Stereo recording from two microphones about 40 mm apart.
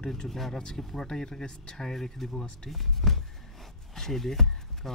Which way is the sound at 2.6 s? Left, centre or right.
Centre.